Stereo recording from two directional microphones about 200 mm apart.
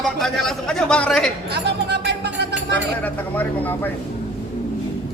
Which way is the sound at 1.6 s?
55° right (ahead or behind).